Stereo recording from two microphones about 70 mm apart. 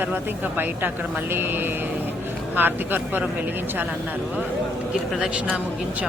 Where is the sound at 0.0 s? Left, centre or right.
Right.